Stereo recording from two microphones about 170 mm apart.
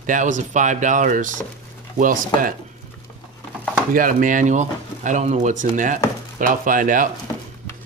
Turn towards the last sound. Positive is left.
turn(degrees=-50)  # may be behind; listen again after turning